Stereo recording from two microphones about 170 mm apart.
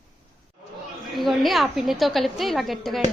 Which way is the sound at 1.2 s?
Centre (ahead or behind).